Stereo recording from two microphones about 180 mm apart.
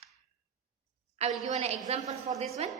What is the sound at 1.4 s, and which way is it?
Speech, 35° right (ahead or behind).